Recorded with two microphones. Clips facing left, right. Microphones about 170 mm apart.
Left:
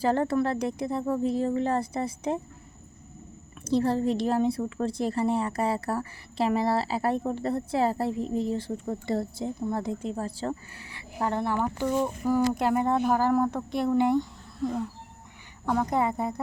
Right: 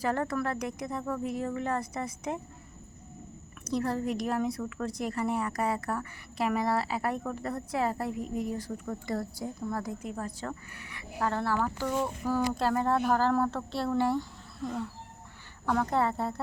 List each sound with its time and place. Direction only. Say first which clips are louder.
0.0 s a woman's voice: left 6 dB; 30° left (ahead or behind)
3.6 s a woman's voice: left 6 dB; 30° left (ahead or behind)
15.6 s a woman's voice: left 2 dB; 15° left (ahead or behind)